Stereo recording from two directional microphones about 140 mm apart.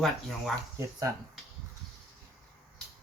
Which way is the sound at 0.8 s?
20° right (ahead or behind).